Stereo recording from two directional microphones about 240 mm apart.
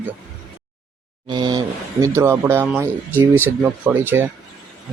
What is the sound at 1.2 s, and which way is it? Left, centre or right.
Speech, centre.